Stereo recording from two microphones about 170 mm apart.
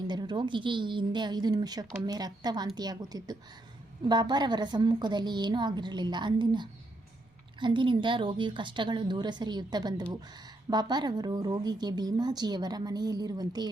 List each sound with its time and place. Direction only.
0.1 s a woman's voice: 25° right (ahead or behind)